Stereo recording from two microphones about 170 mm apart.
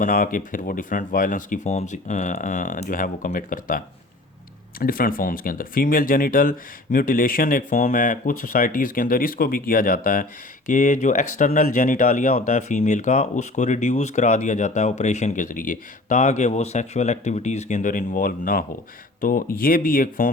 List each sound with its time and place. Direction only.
0.0 s speech: 55° left (ahead or behind)
10.7 s speech: 45° left (ahead or behind)